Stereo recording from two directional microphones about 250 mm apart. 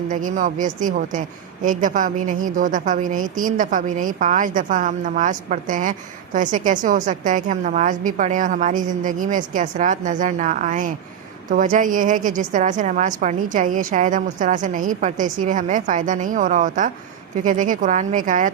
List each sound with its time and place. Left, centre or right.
0.1 s a woman's voice: right